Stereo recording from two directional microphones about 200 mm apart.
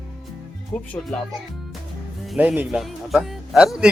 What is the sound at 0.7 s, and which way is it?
Speech, 5° left (ahead or behind).